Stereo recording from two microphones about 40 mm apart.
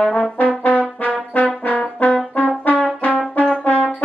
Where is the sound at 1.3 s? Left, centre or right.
Left.